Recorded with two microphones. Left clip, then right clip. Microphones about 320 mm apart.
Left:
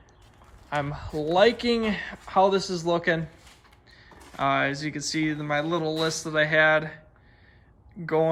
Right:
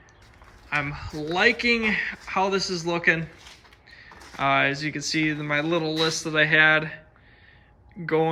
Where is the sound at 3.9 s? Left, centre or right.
Centre.